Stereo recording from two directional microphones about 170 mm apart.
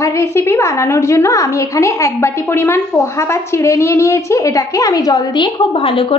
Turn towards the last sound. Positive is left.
turn(degrees=35)  # may be behind; listen again after turning